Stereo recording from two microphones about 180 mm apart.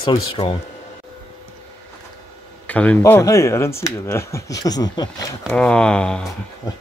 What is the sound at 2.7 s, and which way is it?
Speech, 10° left (ahead or behind).